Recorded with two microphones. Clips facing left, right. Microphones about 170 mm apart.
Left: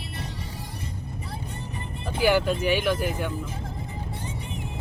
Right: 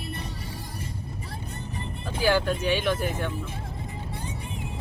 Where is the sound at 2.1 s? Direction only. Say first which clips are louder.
Left 2 dB; 15° left (ahead or behind).